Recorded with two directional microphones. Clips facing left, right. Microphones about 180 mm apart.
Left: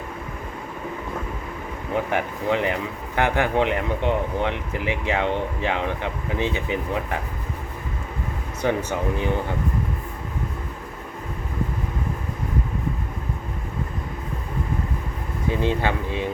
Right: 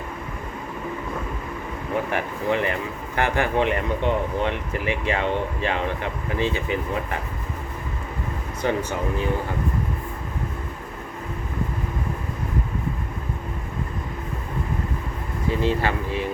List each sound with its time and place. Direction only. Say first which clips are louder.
2.1 s speech: left 1 dB; 15° left (ahead or behind)
8.9 s speech: left 1 dB; 20° left (ahead or behind)
15.4 s speech: even; 20° left (ahead or behind)